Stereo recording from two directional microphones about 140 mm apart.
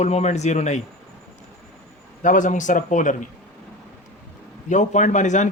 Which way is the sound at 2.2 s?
65° left (ahead or behind).